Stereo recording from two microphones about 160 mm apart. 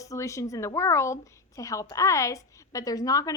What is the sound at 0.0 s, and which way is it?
A woman's voice, 20° left (ahead or behind).